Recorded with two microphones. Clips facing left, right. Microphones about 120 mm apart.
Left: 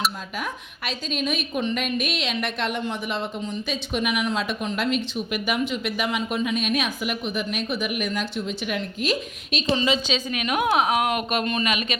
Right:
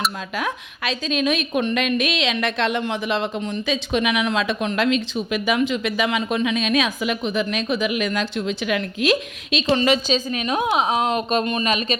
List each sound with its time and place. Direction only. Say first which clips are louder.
0.3 s a woman's voice: right 5 dB; 90° right
9.6 s a woman's voice: right 4 dB; 65° right (ahead or behind)
10.1 s a woman's voice: right 4 dB; 35° right (ahead or behind)